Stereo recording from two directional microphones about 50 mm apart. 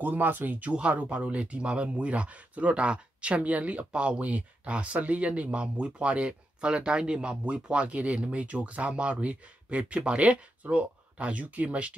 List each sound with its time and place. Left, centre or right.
0.0 s speech: right